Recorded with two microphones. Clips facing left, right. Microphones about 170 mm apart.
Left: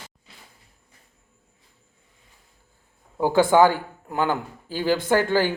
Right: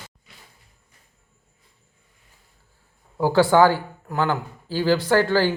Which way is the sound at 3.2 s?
20° left (ahead or behind).